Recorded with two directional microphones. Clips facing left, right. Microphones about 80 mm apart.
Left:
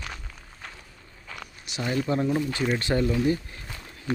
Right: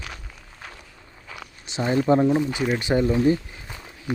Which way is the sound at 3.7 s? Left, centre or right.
Centre.